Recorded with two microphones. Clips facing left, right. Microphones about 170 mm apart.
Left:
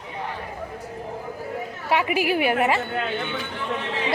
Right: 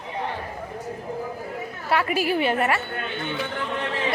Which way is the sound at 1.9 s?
15° left (ahead or behind).